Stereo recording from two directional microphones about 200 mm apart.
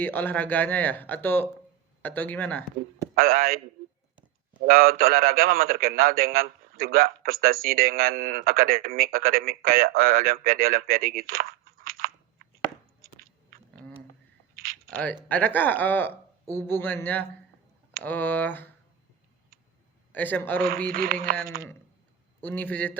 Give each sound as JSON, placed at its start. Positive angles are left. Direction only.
{"t": 0.0, "sound": "speech", "side_deg": 10}
{"t": 3.2, "sound": "a man's voice", "side_deg": -45}
{"t": 4.6, "sound": "a man's voice", "side_deg": -45}
{"t": 14.5, "sound": "a sound", "side_deg": -45}
{"t": 14.8, "sound": "speech", "side_deg": 5}
{"t": 20.1, "sound": "speech", "side_deg": 10}
{"t": 20.9, "sound": "a man's voice", "side_deg": -45}
{"t": 22.4, "sound": "speech", "side_deg": 10}